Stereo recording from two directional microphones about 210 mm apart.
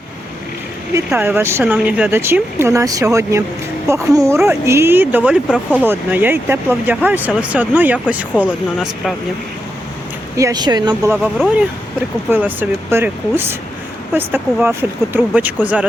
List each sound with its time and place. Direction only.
1.1 s speech: 10° right (ahead or behind)
10.3 s speech: 15° right (ahead or behind)
12.3 s speech: 10° right (ahead or behind)